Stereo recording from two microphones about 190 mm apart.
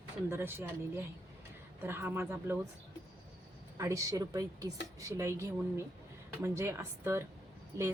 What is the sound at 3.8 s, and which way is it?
A woman's voice, 15° right (ahead or behind).